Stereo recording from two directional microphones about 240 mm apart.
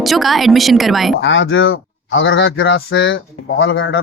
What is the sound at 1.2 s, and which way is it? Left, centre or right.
Speech, left.